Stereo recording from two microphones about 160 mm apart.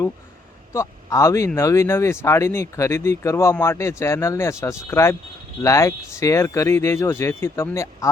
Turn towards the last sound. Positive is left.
turn(degrees=15)  # may be behind; listen again after turning